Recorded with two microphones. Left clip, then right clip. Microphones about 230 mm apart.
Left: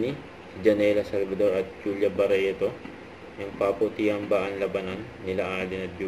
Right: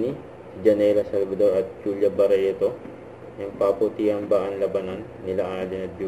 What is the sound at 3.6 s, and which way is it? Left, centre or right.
A man's voice, left.